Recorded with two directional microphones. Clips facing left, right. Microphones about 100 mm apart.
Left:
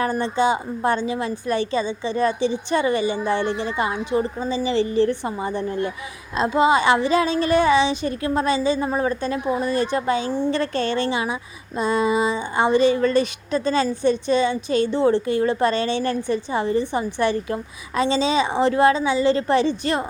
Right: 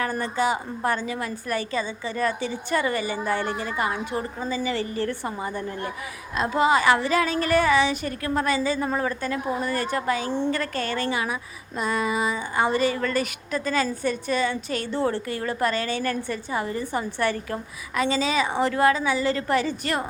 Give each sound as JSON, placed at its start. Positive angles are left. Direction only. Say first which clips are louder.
{"t": 0.0, "sound": "a woman's voice", "louder": "left 4 dB", "side_deg": 25}